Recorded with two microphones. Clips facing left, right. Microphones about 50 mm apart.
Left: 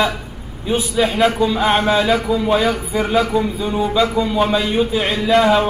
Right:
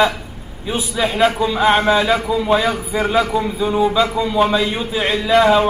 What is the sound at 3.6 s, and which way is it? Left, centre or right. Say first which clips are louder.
Speech: right 5 dB; centre.